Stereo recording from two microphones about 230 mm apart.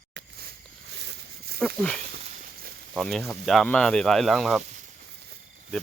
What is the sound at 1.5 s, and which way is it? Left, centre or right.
Speech, centre.